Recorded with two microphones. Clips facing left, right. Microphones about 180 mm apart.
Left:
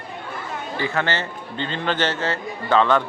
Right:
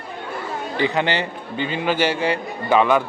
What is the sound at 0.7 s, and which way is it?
A man's voice, 20° right (ahead or behind).